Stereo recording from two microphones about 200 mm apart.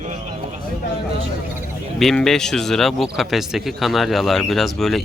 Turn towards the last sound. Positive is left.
turn(degrees=0)  # may be behind; listen again after turning